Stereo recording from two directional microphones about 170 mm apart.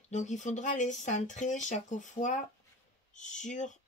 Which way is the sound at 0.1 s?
45° left (ahead or behind).